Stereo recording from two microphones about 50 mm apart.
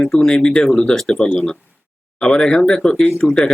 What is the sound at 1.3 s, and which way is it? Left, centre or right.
Speech, centre.